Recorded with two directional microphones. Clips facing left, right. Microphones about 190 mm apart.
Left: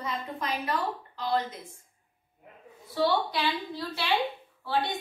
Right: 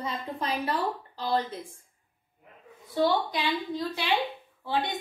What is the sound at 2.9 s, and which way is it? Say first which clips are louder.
A woman's voice: right 1 dB; 20° right (ahead or behind).